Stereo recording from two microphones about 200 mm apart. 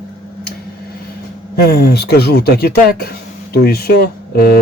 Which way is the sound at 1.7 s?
55° left (ahead or behind).